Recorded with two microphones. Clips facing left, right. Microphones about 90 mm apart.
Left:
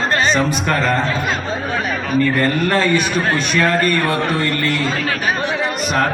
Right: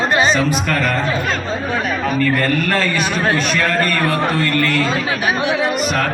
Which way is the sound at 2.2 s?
20° left (ahead or behind).